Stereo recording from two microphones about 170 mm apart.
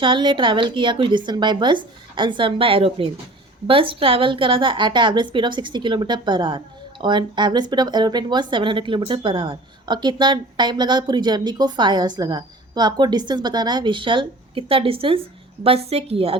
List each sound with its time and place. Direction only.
0.0 s a woman's voice: 30° right (ahead or behind)